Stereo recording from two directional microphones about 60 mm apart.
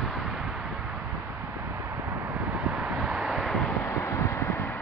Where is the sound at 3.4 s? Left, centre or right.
Centre.